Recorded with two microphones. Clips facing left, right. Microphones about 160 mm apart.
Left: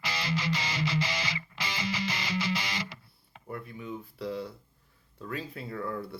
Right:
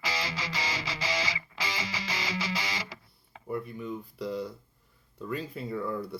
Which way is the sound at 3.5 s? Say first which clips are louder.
Right 4 dB; centre (ahead or behind).